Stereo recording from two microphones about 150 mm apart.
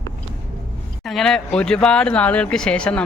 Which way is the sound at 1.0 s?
5° left (ahead or behind).